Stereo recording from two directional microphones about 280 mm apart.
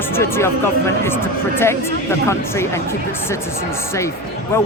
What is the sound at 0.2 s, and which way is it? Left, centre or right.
Speech, centre.